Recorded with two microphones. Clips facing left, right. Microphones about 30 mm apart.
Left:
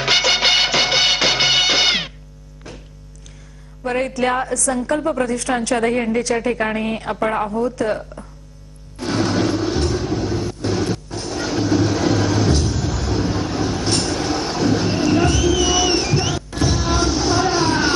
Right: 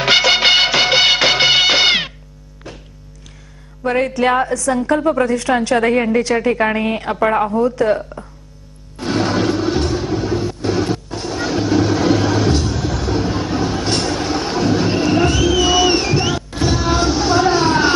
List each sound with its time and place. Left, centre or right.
0.0 s music: centre
3.8 s a woman's voice: centre
9.0 s music: centre